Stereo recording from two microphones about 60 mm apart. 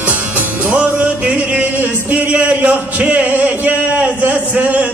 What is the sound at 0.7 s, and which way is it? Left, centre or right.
Music, right.